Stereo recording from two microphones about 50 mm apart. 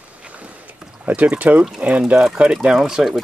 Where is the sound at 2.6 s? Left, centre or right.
Centre.